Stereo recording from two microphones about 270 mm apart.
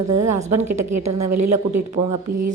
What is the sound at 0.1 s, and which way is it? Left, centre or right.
A woman's voice, right.